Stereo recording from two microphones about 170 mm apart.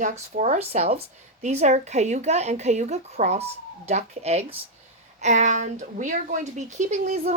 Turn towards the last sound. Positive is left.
turn(degrees=-40)  # may be behind; listen again after turning